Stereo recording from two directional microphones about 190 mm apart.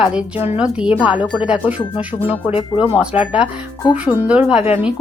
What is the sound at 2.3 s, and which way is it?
Speech, 30° left (ahead or behind).